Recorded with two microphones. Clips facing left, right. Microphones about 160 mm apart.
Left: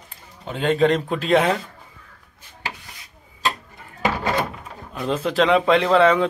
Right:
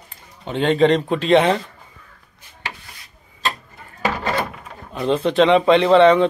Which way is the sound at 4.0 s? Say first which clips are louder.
Even; 15° left (ahead or behind).